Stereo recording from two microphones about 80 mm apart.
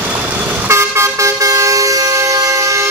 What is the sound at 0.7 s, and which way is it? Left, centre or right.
Vehicle, right.